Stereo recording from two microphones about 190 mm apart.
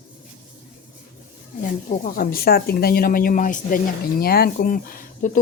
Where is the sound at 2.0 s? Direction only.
50° left (ahead or behind).